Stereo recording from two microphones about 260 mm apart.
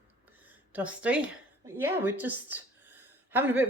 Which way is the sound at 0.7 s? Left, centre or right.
Centre.